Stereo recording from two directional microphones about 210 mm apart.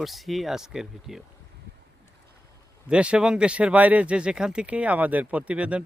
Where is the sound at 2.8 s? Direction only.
5° right (ahead or behind).